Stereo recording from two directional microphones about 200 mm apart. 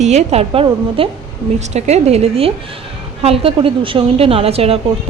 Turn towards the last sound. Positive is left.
turn(degrees=-30)  # may be behind; listen again after turning